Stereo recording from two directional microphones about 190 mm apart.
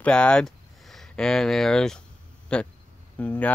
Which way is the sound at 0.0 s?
5° left (ahead or behind).